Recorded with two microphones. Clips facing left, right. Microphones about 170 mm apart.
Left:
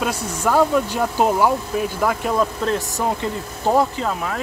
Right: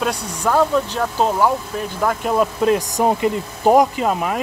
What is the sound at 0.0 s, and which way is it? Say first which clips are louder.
Speech: right 1 dB; 5° left (ahead or behind).